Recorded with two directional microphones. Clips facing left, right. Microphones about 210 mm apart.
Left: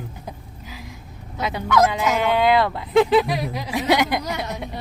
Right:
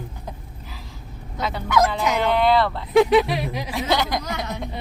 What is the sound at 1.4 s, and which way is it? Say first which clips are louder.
Speech: left 2 dB; 15° left (ahead or behind).